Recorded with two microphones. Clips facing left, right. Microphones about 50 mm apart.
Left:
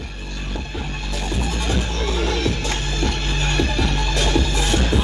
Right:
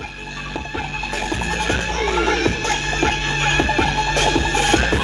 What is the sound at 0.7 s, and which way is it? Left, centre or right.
Music, right.